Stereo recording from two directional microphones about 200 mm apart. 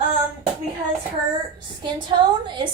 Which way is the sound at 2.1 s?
25° right (ahead or behind).